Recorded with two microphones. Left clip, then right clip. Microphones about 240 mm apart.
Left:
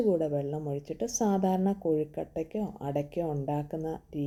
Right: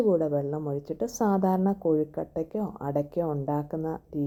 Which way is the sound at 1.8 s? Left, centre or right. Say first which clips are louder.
Right 4 dB; right.